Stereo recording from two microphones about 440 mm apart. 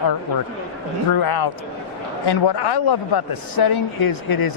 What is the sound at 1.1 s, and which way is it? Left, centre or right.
A man's voice, left.